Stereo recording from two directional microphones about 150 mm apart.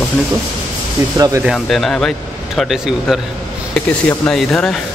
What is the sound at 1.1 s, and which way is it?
Speech, 20° right (ahead or behind).